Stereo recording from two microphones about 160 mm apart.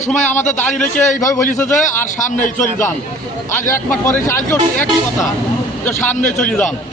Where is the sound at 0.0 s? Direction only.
50° left (ahead or behind).